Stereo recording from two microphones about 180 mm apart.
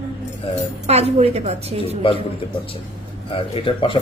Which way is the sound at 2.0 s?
30° left (ahead or behind).